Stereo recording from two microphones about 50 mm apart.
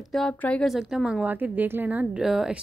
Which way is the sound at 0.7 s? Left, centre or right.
Centre.